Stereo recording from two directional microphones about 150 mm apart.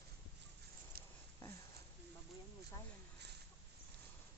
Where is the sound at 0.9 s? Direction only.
90° right.